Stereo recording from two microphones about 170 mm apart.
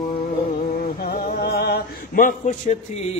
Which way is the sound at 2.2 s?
45° left (ahead or behind).